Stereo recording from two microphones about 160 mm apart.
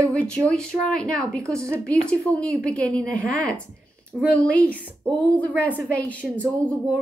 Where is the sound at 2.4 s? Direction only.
5° left (ahead or behind).